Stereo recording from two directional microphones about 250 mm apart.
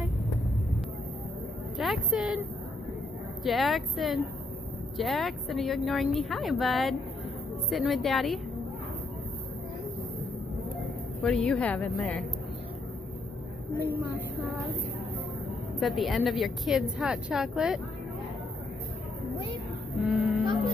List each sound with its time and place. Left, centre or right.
1.8 s a woman's voice: centre
3.4 s a woman's voice: centre
11.2 s a woman's voice: centre
13.8 s a woman's voice: centre
15.8 s a woman's voice: centre
20.1 s speech: centre
20.4 s music: centre